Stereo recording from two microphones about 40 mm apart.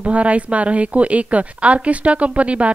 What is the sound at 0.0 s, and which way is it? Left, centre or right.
A woman's voice, right.